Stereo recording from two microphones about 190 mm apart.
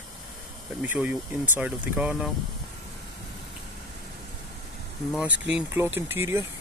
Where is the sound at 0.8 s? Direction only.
5° right (ahead or behind).